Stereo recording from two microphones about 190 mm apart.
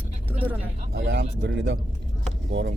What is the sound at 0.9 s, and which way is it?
Speech, 60° right (ahead or behind).